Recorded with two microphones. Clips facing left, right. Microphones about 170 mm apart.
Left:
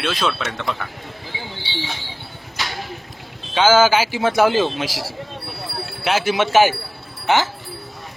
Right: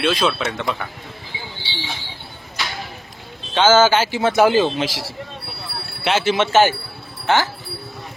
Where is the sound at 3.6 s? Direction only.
5° left (ahead or behind).